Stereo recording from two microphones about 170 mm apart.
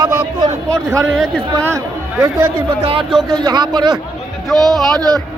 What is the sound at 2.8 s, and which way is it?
Speech, 30° right (ahead or behind).